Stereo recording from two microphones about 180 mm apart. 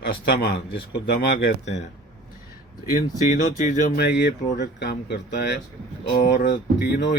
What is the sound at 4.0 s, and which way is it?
Speech, 65° left (ahead or behind).